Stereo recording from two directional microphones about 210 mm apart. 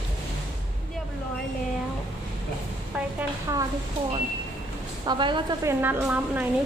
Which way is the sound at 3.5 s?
15° right (ahead or behind).